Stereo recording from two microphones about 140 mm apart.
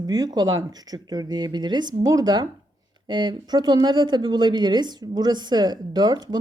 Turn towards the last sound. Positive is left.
turn(degrees=-30)  # may be behind; listen again after turning